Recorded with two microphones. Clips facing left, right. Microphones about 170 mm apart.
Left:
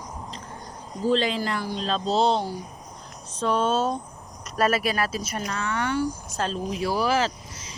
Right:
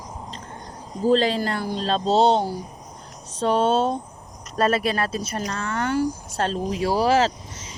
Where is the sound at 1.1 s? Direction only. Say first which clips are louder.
Right 4 dB; 40° right (ahead or behind).